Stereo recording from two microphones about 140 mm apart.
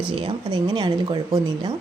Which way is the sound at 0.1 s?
40° right (ahead or behind).